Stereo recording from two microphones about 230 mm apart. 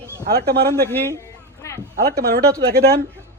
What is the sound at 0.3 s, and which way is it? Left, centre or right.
Speech, right.